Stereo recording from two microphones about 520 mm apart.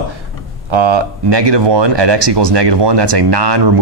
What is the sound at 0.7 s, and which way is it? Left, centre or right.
Speech, right.